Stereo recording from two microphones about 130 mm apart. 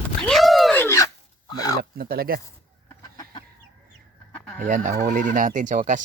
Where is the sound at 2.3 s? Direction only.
90° right.